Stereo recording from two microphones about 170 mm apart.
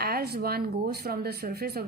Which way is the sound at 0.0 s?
65° right (ahead or behind).